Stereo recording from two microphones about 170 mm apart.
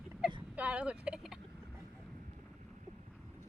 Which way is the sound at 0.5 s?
10° right (ahead or behind).